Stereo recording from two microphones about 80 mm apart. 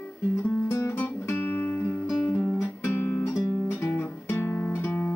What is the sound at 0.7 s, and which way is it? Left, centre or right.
Music, left.